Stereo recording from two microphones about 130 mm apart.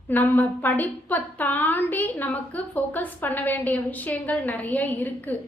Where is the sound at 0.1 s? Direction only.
15° left (ahead or behind).